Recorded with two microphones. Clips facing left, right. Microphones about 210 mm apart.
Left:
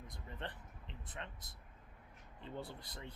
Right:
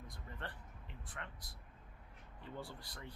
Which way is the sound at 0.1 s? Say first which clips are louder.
Left 3 dB; 20° left (ahead or behind).